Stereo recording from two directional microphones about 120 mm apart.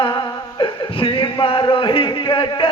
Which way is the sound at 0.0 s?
40° left (ahead or behind).